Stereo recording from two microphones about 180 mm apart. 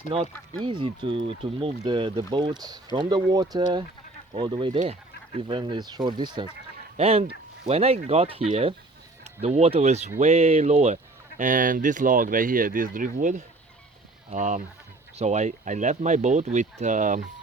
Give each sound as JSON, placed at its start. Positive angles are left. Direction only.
{"t": 0.1, "sound": "speech", "side_deg": -30}